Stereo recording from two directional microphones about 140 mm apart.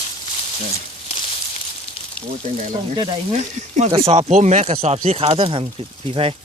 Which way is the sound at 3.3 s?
55° right (ahead or behind).